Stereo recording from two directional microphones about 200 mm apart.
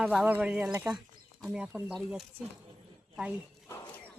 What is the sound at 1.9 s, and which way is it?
Speech, centre (ahead or behind).